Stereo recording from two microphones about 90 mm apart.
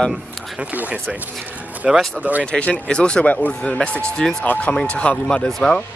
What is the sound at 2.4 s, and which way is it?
Speech, 10° left (ahead or behind).